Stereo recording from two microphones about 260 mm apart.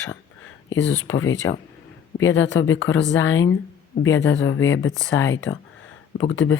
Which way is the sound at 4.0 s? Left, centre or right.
Left.